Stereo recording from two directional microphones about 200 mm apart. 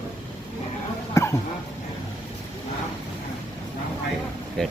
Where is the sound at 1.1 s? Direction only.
15° left (ahead or behind).